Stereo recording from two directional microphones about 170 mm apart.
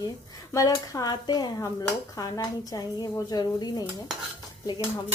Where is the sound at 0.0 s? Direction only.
20° left (ahead or behind).